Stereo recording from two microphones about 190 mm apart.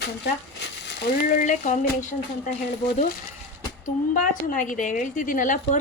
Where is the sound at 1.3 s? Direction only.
40° left (ahead or behind).